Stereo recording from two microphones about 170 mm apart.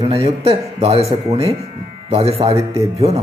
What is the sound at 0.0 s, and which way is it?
Speech, 35° right (ahead or behind).